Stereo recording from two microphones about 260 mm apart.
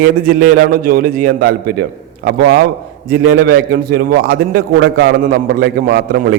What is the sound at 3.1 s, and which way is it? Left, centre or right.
A man's voice, right.